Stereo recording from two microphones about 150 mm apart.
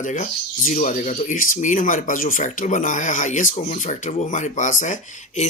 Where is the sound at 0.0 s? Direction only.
55° left (ahead or behind).